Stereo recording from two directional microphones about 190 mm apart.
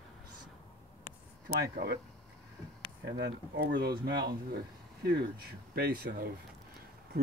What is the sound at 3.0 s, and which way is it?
Speech, 60° right (ahead or behind).